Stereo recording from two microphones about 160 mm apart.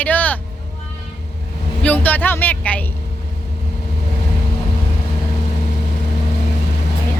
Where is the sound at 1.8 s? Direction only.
10° left (ahead or behind).